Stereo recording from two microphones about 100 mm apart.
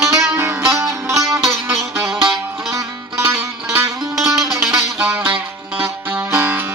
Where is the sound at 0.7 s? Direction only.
30° right (ahead or behind).